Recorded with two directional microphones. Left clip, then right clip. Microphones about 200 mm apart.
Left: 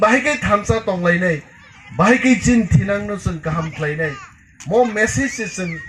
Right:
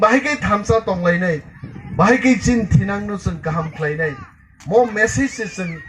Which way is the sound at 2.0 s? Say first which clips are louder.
Even; 45° left (ahead or behind).